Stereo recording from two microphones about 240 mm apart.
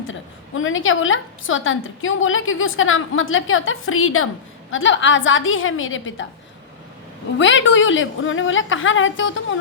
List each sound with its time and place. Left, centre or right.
0.1 s a woman's voice: left
7.3 s a woman's voice: left